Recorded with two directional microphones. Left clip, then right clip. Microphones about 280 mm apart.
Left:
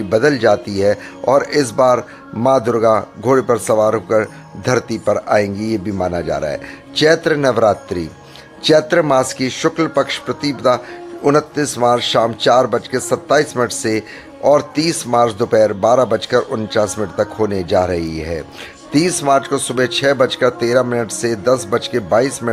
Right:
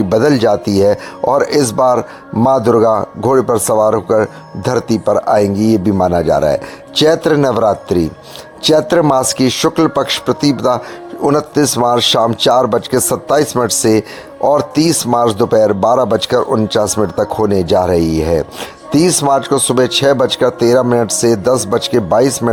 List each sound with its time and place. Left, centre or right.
0.1 s speech: right